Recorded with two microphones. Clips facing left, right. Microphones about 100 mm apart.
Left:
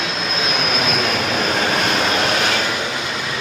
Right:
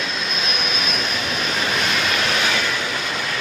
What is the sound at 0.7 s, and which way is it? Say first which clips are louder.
Vehicle: left 5 dB; 75° left (ahead or behind).